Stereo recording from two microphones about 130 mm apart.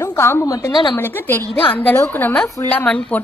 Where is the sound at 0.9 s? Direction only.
15° left (ahead or behind).